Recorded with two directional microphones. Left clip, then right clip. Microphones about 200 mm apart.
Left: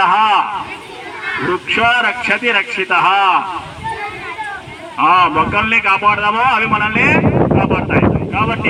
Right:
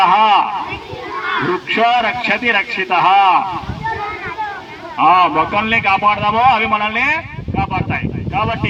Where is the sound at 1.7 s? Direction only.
45° right (ahead or behind).